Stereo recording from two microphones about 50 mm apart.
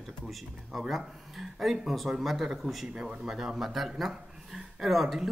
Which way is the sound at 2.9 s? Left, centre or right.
Centre.